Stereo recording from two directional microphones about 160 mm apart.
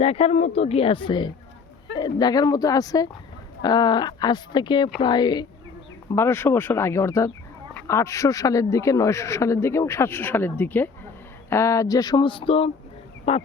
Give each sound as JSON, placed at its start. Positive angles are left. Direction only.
{"t": 0.0, "sound": "speech", "side_deg": 40}
{"t": 6.1, "sound": "speech", "side_deg": 15}